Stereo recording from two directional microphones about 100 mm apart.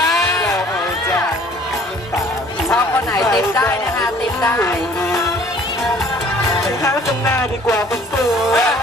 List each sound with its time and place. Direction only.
2.7 s a sound: 30° left (ahead or behind)
4.4 s music: 20° left (ahead or behind)
7.2 s music: 30° left (ahead or behind)
8.2 s music: centre (ahead or behind)